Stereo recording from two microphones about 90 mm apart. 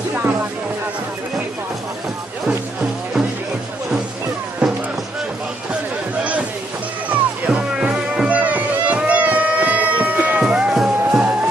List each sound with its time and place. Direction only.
7.1 s music: 15° right (ahead or behind)
10.4 s music: 5° right (ahead or behind)